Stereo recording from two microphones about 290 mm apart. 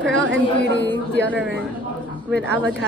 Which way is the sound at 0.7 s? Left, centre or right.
Left.